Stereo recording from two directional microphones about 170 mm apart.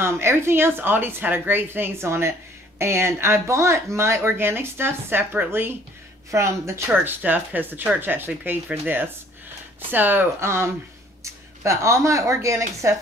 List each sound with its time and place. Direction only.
0.0 s speech: 15° right (ahead or behind)